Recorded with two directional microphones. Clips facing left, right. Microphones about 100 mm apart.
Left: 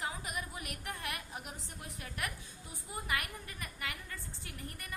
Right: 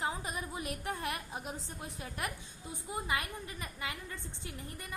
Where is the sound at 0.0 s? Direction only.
30° right (ahead or behind).